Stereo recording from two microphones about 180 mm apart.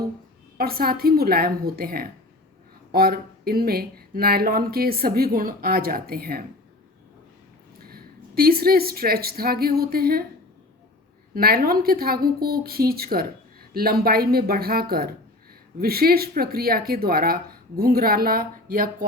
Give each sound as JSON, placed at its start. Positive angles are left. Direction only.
{"t": 0.5, "sound": "a woman's voice", "side_deg": -55}
{"t": 7.9, "sound": "speech", "side_deg": -55}
{"t": 11.3, "sound": "a woman's voice", "side_deg": -55}